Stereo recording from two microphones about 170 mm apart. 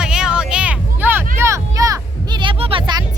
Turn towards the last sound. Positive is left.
turn(degrees=-30)  # may be behind; listen again after turning